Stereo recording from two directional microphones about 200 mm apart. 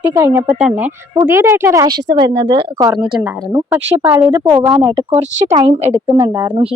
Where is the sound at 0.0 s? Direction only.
15° right (ahead or behind).